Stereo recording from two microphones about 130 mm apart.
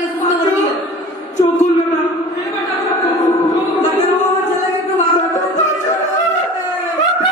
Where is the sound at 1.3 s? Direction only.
65° left (ahead or behind).